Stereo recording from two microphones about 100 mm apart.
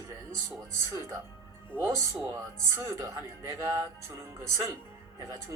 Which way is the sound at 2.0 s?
30° right (ahead or behind).